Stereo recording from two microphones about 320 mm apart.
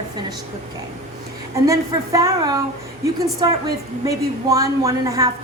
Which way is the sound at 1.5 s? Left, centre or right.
Centre.